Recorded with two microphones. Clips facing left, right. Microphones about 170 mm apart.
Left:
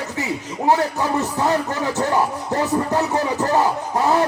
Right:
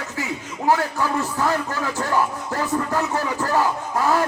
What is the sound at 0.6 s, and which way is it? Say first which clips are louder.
A man's voice: left 2 dB; 20° left (ahead or behind).